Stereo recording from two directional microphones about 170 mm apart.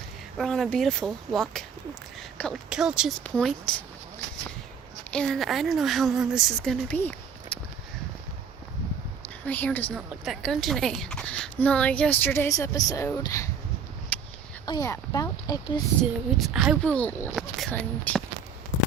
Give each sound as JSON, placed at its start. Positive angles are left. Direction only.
{"t": 0.3, "sound": "speech", "side_deg": 0}
{"t": 3.2, "sound": "a woman's voice", "side_deg": 5}
{"t": 5.1, "sound": "speech", "side_deg": 5}
{"t": 9.5, "sound": "a woman's voice", "side_deg": 10}
{"t": 9.9, "sound": "a woman's voice", "side_deg": 0}
{"t": 14.1, "sound": "a sound", "side_deg": 10}
{"t": 14.7, "sound": "speech", "side_deg": 20}
{"t": 16.4, "sound": "speech", "side_deg": -5}
{"t": 16.8, "sound": "a woman's voice", "side_deg": 10}